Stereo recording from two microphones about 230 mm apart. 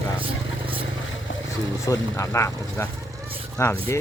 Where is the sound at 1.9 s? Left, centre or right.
Centre.